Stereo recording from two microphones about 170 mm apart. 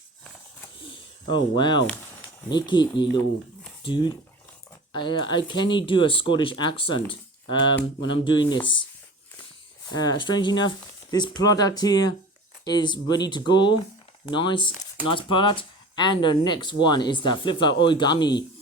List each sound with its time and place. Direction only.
1.3 s speech: 25° left (ahead or behind)
9.8 s speech: 25° left (ahead or behind)